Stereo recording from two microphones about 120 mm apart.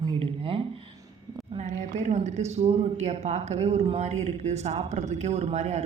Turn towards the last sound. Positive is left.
turn(degrees=-65)  # may be behind; listen again after turning